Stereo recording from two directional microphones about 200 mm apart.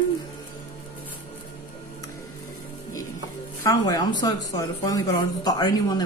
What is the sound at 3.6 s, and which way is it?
Speech, 15° left (ahead or behind).